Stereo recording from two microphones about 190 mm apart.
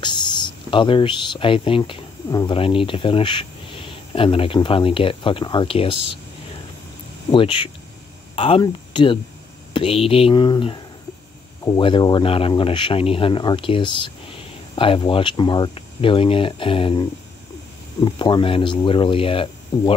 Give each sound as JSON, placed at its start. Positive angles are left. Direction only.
{"t": 0.0, "sound": "speech", "side_deg": 25}
{"t": 7.2, "sound": "speech", "side_deg": 25}
{"t": 18.0, "sound": "speech", "side_deg": 25}